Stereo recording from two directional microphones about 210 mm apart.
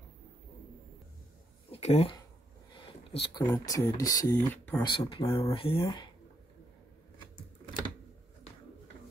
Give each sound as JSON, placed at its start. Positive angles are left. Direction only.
{"t": 1.7, "sound": "speech", "side_deg": 30}
{"t": 4.8, "sound": "speech", "side_deg": 25}